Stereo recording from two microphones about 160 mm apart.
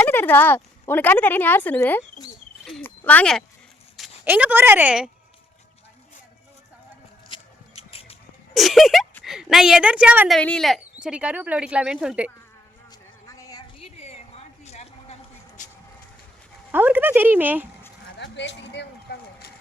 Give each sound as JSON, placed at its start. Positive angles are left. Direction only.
{"t": 0.0, "sound": "speech", "side_deg": 10}
{"t": 4.2, "sound": "speech", "side_deg": -10}
{"t": 7.3, "sound": "a sound", "side_deg": 35}
{"t": 8.5, "sound": "a sound", "side_deg": 0}
{"t": 9.2, "sound": "a woman's voice", "side_deg": 0}
{"t": 10.3, "sound": "speech", "side_deg": 5}
{"t": 10.9, "sound": "speech", "side_deg": -5}
{"t": 12.9, "sound": "a sound", "side_deg": 20}
{"t": 13.8, "sound": "a sound", "side_deg": 40}
{"t": 16.7, "sound": "speech", "side_deg": -10}
{"t": 18.2, "sound": "speech", "side_deg": 90}
{"t": 19.1, "sound": "vehicle", "side_deg": 90}